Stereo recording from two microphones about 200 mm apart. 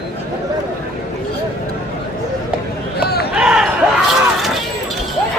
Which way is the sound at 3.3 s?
5° right (ahead or behind).